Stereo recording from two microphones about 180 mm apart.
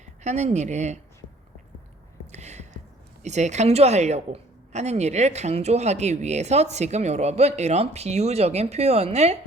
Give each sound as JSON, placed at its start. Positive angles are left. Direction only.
{"t": 0.0, "sound": "a woman's voice", "side_deg": -40}
{"t": 2.3, "sound": "a sound", "side_deg": -40}
{"t": 3.2, "sound": "a woman's voice", "side_deg": -40}